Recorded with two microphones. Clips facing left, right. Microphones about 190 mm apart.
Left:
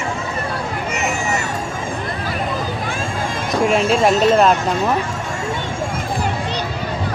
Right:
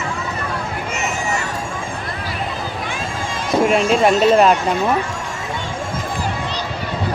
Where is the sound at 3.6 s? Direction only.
Centre (ahead or behind).